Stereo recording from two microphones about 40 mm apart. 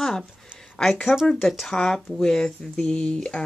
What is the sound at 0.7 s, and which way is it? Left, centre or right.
Speech, centre.